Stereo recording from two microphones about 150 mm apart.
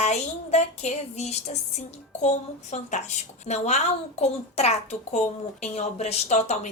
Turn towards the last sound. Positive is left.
turn(degrees=45)  # may be behind; listen again after turning